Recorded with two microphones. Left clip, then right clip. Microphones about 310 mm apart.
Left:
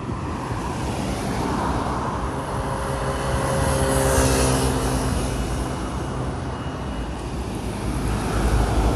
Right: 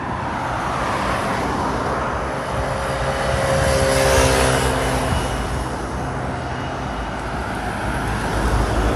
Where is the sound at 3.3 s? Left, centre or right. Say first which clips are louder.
Right 5 dB; right.